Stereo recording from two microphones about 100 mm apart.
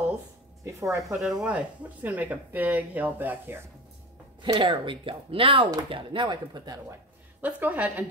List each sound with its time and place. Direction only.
0.7 s a woman's voice: 30° right (ahead or behind)
1.0 s speech: 5° right (ahead or behind)
4.4 s speech: 55° right (ahead or behind)
7.4 s speech: 15° right (ahead or behind)